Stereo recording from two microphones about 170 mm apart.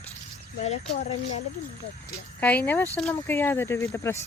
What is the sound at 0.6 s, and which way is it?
Speech, 40° left (ahead or behind).